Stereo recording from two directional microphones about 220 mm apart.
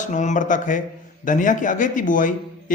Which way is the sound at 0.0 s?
35° left (ahead or behind).